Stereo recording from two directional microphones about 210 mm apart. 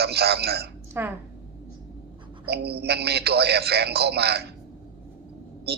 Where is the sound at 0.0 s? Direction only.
50° right (ahead or behind).